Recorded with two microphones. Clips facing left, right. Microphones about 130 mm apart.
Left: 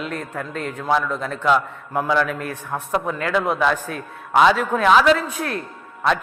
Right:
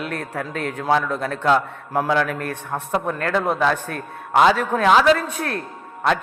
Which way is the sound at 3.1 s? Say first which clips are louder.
Even; 50° right (ahead or behind).